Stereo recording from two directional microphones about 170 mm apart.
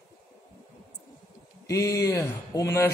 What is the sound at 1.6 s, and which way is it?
A man's voice, 20° left (ahead or behind).